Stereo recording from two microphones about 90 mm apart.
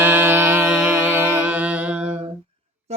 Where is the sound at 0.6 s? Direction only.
10° right (ahead or behind).